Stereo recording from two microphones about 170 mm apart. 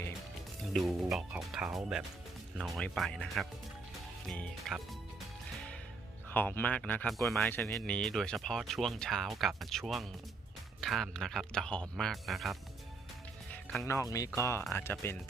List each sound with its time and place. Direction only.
0.7 s speech: centre (ahead or behind)
6.3 s speech: 10° left (ahead or behind)
13.8 s speech: 20° left (ahead or behind)